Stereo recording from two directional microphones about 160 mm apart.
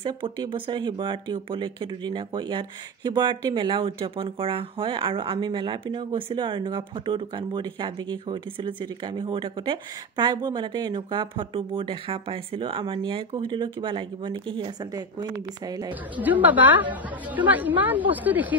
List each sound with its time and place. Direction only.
0.0 s speech: 30° right (ahead or behind)
15.9 s a woman's voice: 10° right (ahead or behind)